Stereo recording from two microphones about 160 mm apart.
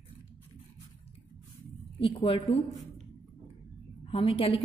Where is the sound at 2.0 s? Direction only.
35° left (ahead or behind).